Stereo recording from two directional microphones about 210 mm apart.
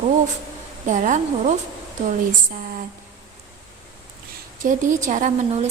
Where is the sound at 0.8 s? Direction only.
35° right (ahead or behind).